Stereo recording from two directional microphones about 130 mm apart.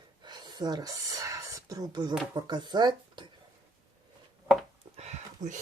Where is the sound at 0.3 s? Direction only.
30° right (ahead or behind).